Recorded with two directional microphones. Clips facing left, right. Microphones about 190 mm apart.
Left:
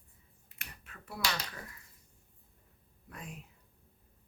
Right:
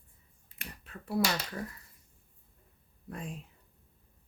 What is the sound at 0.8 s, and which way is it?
Speech, 35° right (ahead or behind).